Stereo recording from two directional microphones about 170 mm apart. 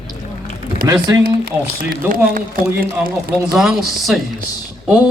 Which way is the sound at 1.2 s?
60° right (ahead or behind).